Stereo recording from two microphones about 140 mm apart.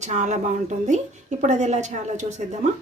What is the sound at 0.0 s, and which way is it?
A woman's voice, 60° right (ahead or behind).